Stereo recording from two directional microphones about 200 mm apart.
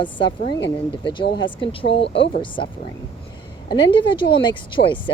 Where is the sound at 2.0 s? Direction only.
65° left (ahead or behind).